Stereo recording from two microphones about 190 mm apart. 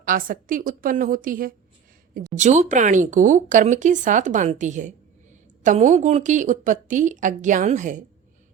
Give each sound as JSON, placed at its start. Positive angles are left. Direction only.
{"t": 0.0, "sound": "a woman's voice", "side_deg": -45}